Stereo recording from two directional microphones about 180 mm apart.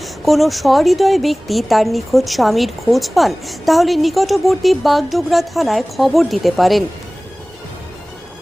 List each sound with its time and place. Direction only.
0.0 s speech: centre (ahead or behind)